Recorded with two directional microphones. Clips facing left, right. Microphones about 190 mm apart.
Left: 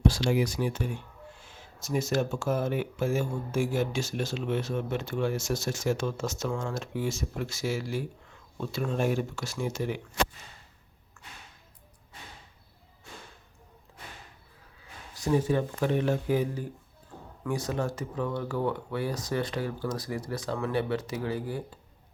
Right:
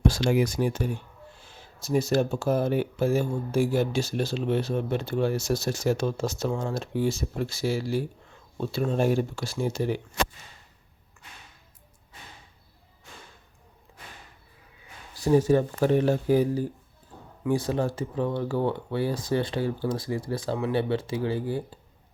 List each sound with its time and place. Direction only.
0.0 s speech: 50° right (ahead or behind); by 10.0 s 35° right (ahead or behind)
15.1 s speech: 35° right (ahead or behind)